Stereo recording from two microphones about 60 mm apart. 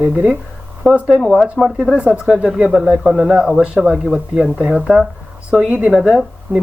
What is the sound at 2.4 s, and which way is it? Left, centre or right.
Speech, centre.